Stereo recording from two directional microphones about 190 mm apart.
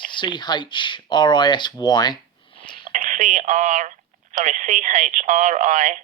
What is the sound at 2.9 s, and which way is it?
Speech, 40° right (ahead or behind).